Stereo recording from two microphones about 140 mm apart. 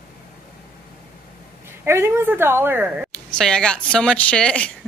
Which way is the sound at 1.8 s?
20° right (ahead or behind).